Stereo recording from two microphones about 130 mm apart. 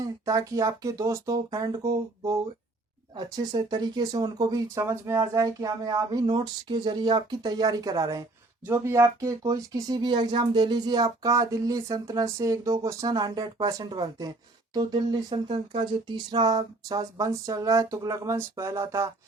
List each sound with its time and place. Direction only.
0.0 s speech: 25° right (ahead or behind)
3.3 s speech: 30° right (ahead or behind)